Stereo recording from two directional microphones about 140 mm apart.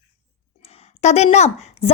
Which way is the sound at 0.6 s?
50° left (ahead or behind).